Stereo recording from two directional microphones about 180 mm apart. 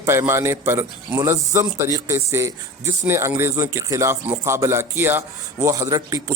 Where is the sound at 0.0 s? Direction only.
15° right (ahead or behind).